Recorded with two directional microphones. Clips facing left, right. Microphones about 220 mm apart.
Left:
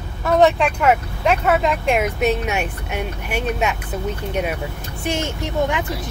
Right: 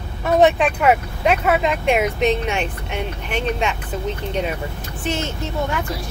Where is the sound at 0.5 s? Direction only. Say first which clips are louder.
Right 1 dB; centre (ahead or behind).